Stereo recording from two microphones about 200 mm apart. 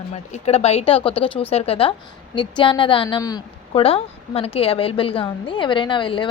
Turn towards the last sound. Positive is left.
turn(degrees=25)  # may be behind; listen again after turning